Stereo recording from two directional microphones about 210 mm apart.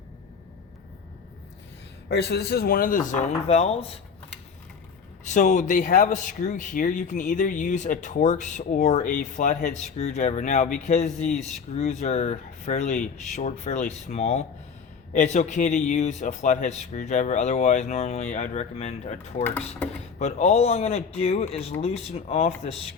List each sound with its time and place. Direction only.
2.0 s a man's voice: 50° left (ahead or behind); by 3.9 s 30° left (ahead or behind)
5.2 s a man's voice: 35° left (ahead or behind)
19.5 s speech: 10° left (ahead or behind)
20.1 s speech: 30° left (ahead or behind)